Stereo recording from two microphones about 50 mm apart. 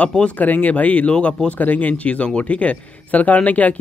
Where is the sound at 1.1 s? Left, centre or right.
Centre.